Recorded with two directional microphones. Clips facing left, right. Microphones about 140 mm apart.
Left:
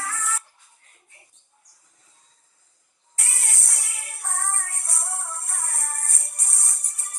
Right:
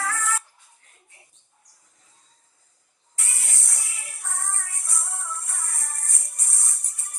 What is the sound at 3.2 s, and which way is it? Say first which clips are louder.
Music: left 3 dB; 75° left (ahead or behind).